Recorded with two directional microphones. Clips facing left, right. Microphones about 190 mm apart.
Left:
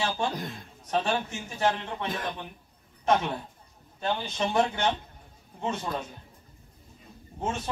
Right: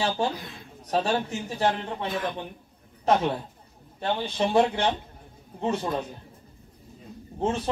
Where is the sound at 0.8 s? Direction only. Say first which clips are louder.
Right 3 dB; 35° right (ahead or behind).